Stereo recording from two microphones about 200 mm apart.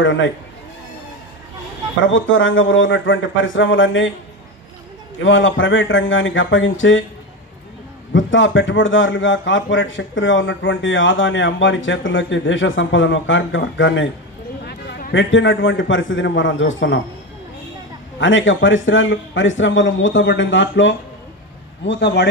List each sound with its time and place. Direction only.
0.0 s a man's voice: 70° left (ahead or behind)
2.0 s a man's voice: 70° left (ahead or behind)
5.2 s a man's voice: 70° left (ahead or behind)
8.1 s a man's voice: 70° left (ahead or behind)
14.6 s a man's voice: 55° left (ahead or behind); by 17.0 s 70° left (ahead or behind)
18.2 s a man's voice: 70° left (ahead or behind)